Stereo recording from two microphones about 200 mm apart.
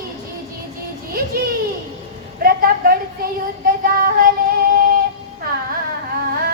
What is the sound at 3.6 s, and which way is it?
Child singing, 45° right (ahead or behind).